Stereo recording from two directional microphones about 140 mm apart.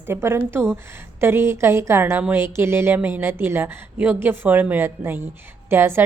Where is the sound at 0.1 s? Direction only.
20° right (ahead or behind).